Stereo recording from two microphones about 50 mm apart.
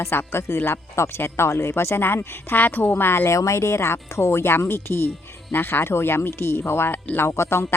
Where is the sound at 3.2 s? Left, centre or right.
Left.